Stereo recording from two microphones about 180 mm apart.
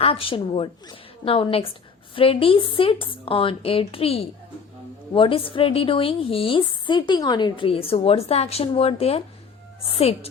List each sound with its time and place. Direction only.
0.0 s a woman's voice: 30° left (ahead or behind)